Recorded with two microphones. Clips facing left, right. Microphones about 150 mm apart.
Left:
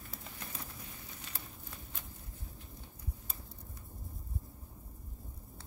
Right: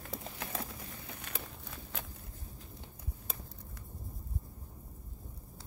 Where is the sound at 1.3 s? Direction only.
55° right (ahead or behind).